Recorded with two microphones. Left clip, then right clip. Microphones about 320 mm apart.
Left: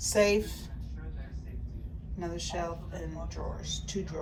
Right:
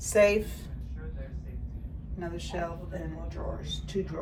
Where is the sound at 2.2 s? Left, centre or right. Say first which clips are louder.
Even; centre.